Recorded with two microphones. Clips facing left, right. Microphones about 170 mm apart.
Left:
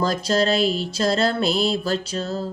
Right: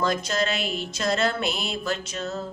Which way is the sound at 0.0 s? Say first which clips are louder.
Left 4 dB; 35° left (ahead or behind).